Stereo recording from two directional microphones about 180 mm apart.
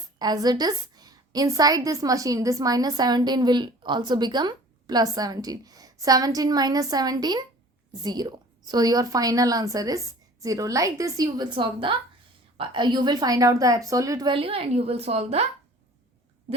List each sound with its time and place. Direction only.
0.2 s a woman's voice: 20° right (ahead or behind)